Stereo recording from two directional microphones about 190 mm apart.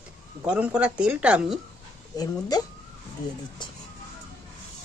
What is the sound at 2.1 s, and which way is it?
Speech, 20° left (ahead or behind).